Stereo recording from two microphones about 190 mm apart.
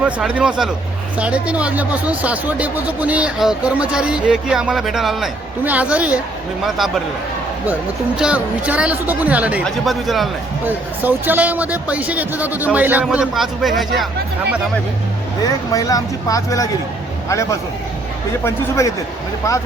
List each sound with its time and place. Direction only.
0.0 s speech: 5° right (ahead or behind)
7.7 s speech: 5° right (ahead or behind)
15.4 s speech: 20° left (ahead or behind)